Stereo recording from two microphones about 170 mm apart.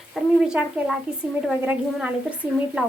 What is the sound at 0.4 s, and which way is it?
A woman's voice, 5° right (ahead or behind).